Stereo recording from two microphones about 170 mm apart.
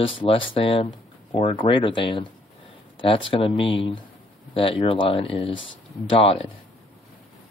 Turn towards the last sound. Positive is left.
turn(degrees=35)  # may be behind; listen again after turning